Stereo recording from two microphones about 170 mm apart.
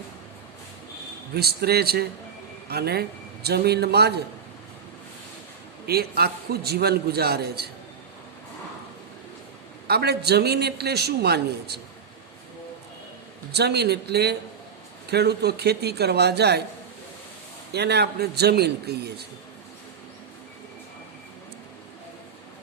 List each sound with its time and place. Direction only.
1.3 s a man's voice: 70° right (ahead or behind)
5.8 s a man's voice: 65° right (ahead or behind)
9.8 s a man's voice: 70° right (ahead or behind)
13.5 s a man's voice: 75° right (ahead or behind)
17.7 s a man's voice: 75° right (ahead or behind)